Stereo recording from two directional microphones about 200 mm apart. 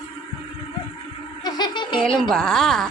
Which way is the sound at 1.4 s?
20° left (ahead or behind).